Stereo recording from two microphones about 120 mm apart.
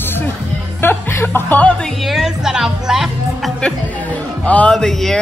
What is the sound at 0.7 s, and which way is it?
Speech, 20° left (ahead or behind).